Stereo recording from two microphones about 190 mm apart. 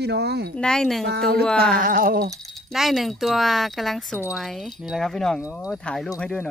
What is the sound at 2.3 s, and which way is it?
Wind chime, centre (ahead or behind).